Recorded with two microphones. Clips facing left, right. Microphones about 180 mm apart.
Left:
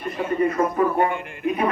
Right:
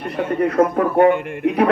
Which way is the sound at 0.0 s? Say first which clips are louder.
Right 2 dB; 70° right (ahead or behind).